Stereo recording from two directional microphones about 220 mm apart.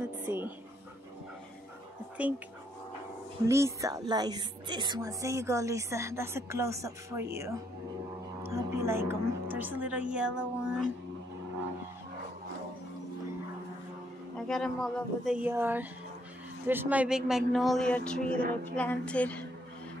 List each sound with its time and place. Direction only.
0.2 s a sound: 10° right (ahead or behind)
2.1 s speech: 5° right (ahead or behind)
3.4 s a woman's voice: 15° right (ahead or behind)
8.5 s a woman's voice: 10° right (ahead or behind)
14.5 s speech: centre (ahead or behind)
18.8 s music: 5° left (ahead or behind)